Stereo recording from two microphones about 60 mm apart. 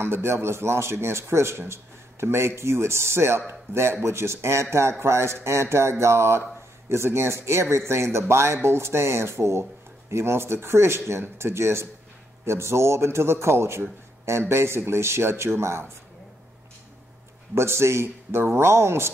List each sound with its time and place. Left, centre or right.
0.0 s speech: right
17.6 s speech: right